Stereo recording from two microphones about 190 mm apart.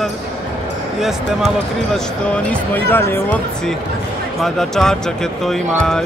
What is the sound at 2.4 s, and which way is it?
A man's voice, 5° left (ahead or behind).